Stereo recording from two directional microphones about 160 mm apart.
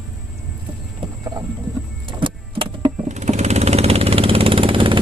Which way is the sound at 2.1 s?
30° right (ahead or behind).